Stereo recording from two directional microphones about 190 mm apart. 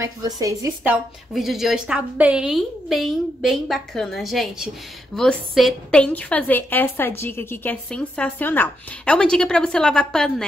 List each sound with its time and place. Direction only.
0.0 s speech: 15° right (ahead or behind)
1.3 s a woman's voice: centre (ahead or behind)